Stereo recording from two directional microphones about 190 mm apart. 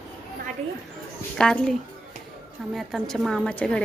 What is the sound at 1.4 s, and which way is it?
Speech, 5° left (ahead or behind).